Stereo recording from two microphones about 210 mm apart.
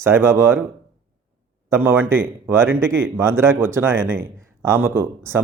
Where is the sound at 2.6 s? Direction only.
70° right (ahead or behind).